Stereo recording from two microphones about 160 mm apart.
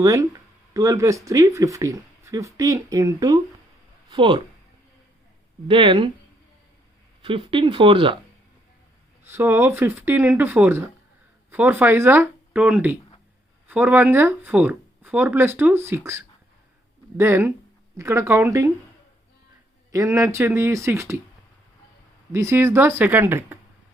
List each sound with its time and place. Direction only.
0.0 s speech: 20° right (ahead or behind)
5.6 s speech: 35° right (ahead or behind)
7.3 s speech: 35° right (ahead or behind)
9.2 s speech: 15° right (ahead or behind)
19.9 s speech: 20° right (ahead or behind)
22.3 s speech: 15° right (ahead or behind)